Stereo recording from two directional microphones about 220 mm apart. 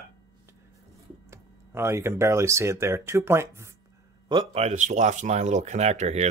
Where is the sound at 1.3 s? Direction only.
10° right (ahead or behind).